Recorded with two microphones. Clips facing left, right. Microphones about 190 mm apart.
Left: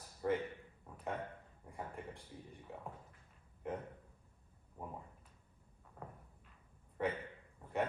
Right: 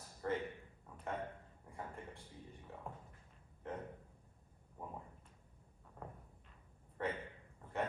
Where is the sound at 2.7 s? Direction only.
15° left (ahead or behind).